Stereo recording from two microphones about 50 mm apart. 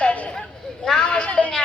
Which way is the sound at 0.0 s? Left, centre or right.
Left.